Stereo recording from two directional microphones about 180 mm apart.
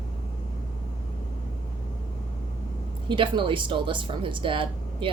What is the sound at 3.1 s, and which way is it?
Speech, 25° right (ahead or behind).